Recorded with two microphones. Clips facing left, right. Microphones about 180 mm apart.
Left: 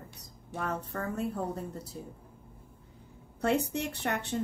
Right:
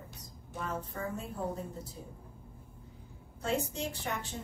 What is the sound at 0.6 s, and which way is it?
Speech, 65° left (ahead or behind).